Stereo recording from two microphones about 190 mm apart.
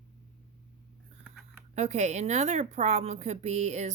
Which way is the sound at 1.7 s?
35° right (ahead or behind).